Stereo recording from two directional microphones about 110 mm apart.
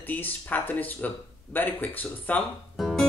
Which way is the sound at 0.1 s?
15° left (ahead or behind).